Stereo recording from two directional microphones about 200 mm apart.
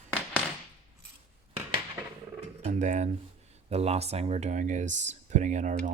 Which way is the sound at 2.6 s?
35° right (ahead or behind).